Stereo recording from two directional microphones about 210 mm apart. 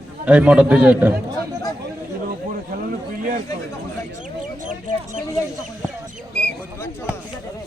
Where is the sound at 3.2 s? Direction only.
40° right (ahead or behind).